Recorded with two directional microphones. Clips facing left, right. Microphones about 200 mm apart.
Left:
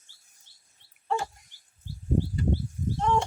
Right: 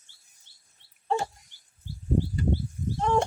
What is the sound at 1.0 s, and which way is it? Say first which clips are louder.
Dog: right 2 dB; 30° right (ahead or behind).